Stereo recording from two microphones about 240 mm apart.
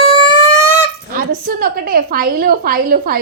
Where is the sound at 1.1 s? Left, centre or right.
Right.